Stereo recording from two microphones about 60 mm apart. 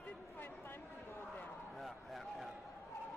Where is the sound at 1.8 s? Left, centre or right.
Centre.